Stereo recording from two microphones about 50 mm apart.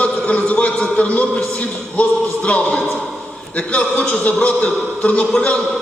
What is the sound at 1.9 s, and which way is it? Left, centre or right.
Music, left.